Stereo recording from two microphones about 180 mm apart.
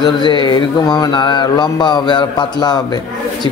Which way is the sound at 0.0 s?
25° left (ahead or behind).